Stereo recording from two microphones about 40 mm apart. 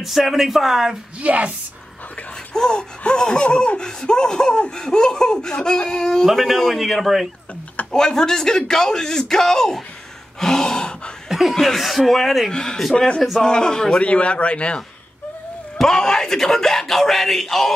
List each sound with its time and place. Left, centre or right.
0.0 s speech: centre
1.2 s a woman's voice: right
2.5 s speech: centre
6.2 s speech: centre
7.9 s speech: centre
10.4 s gasp: centre
11.2 s chuckle: centre
11.5 s speech: centre
12.4 s speech: centre
14.0 s speech: left
15.8 s speech: centre